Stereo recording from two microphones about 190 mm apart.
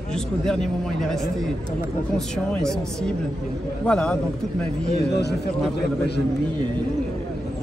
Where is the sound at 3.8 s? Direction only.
5° left (ahead or behind).